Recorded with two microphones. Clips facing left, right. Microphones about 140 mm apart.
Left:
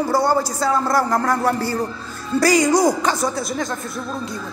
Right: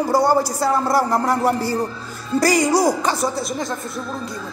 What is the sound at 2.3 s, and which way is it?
Speech, 45° right (ahead or behind).